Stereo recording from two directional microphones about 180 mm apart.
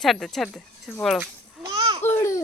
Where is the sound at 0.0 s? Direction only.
Centre (ahead or behind).